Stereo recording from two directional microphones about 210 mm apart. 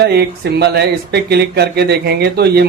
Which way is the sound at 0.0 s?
50° right (ahead or behind).